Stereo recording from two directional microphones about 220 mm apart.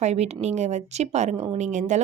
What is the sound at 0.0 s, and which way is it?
A woman's voice, 30° right (ahead or behind).